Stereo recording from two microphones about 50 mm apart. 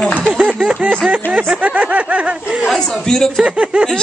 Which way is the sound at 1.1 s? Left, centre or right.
Right.